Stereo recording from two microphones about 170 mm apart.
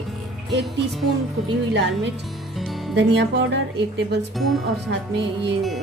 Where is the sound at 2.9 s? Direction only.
85° right.